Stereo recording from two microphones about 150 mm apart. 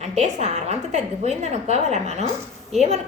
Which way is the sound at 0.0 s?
50° right (ahead or behind).